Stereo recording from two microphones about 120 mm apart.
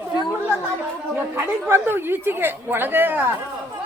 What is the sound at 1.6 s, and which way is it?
A woman's voice, 20° right (ahead or behind).